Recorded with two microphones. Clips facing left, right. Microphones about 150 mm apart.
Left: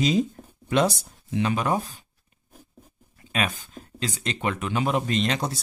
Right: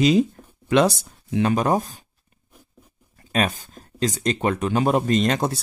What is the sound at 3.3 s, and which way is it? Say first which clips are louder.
Speech: right 5 dB; 40° right (ahead or behind).